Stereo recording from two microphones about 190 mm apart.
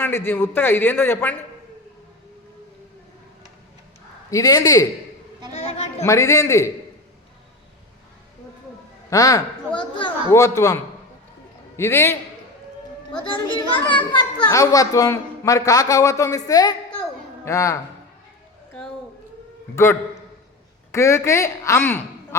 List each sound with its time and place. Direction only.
0.0 s a man's voice: 10° left (ahead or behind)
4.3 s a child's voice: 20° left (ahead or behind)
5.5 s a woman's voice: 35° left (ahead or behind)
6.0 s a man's voice: 15° left (ahead or behind)
9.0 s a man's voice: 15° left (ahead or behind)
11.8 s a man's voice: 10° left (ahead or behind)
13.2 s a child's voice: 25° left (ahead or behind)
19.7 s a man's voice: 15° left (ahead or behind)